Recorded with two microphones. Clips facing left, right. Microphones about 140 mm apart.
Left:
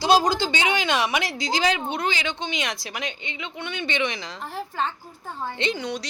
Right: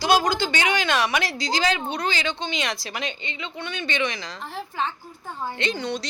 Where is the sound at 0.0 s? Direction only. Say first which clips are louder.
Left 1 dB; 30° left (ahead or behind).